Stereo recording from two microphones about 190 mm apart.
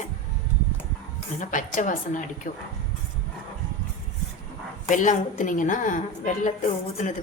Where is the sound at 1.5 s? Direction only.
40° left (ahead or behind).